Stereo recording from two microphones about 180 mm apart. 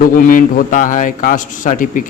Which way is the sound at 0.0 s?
50° left (ahead or behind).